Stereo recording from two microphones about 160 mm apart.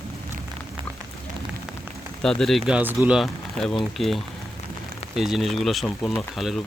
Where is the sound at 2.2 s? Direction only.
5° left (ahead or behind).